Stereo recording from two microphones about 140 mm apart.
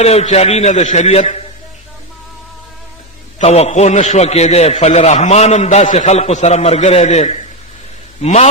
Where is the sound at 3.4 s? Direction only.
50° left (ahead or behind).